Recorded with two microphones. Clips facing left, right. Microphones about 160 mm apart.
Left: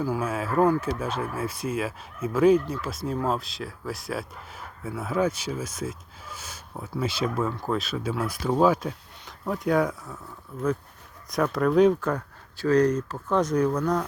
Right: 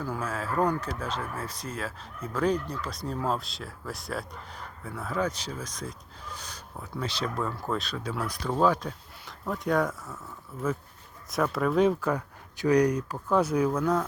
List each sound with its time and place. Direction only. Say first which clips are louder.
0.0 s speech: left 5 dB; 10° left (ahead or behind)
8.4 s speech: left 3 dB; 15° left (ahead or behind)
8.7 s speech: left 4 dB; 5° left (ahead or behind)
11.3 s speech: left 3 dB; centre (ahead or behind)